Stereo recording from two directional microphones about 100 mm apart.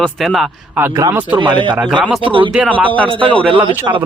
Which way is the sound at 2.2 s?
60° right (ahead or behind).